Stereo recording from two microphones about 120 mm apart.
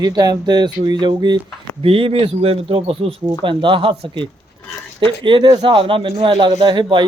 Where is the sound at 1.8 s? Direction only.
50° right (ahead or behind).